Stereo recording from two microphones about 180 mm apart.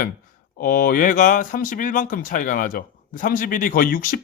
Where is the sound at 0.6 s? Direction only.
50° left (ahead or behind).